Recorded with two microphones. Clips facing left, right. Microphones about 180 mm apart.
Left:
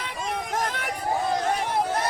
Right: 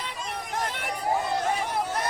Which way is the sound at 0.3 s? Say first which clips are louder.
Left 4 dB; 45° left (ahead or behind).